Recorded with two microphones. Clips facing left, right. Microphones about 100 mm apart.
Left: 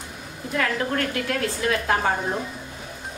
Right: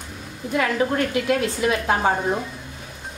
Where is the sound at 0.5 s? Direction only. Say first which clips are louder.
Right 3 dB; 15° right (ahead or behind).